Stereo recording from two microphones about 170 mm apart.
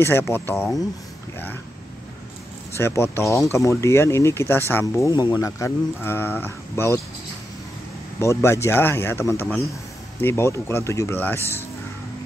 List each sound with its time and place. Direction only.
0.0 s speech: 15° left (ahead or behind)
2.7 s speech: 15° left (ahead or behind)
8.2 s speech: 15° left (ahead or behind)